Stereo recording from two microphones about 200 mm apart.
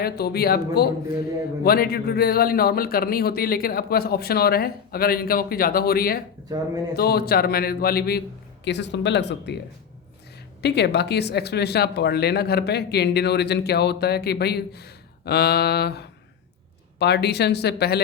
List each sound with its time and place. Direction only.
0.0 s a man's voice: 50° left (ahead or behind)
8.6 s speech: 60° left (ahead or behind)
10.6 s speech: 55° left (ahead or behind)